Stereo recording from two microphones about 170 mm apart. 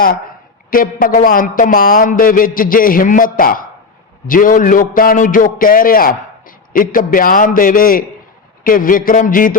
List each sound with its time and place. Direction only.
0.7 s a man's voice: 55° left (ahead or behind)